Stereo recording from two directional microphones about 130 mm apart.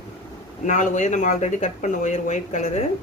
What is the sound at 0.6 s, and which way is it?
Speech, 70° left (ahead or behind).